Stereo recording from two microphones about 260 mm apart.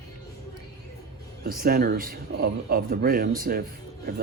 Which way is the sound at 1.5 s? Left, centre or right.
Right.